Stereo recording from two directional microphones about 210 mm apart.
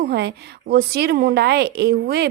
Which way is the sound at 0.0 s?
50° right (ahead or behind).